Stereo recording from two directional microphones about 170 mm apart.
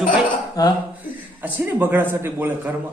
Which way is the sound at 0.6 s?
20° left (ahead or behind).